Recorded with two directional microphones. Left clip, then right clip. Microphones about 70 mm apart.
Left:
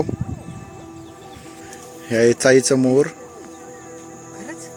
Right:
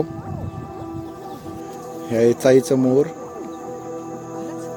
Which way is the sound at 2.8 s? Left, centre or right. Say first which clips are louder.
Left 1 dB; centre.